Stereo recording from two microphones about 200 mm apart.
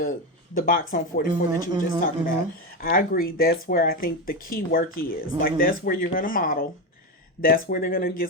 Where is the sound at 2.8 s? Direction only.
45° left (ahead or behind).